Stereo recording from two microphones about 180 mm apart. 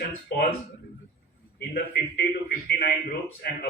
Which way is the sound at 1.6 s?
60° left (ahead or behind).